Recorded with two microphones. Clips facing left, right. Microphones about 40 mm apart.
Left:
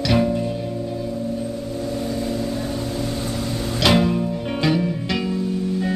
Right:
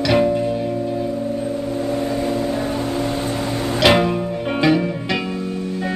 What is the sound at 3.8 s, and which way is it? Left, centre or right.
Music, right.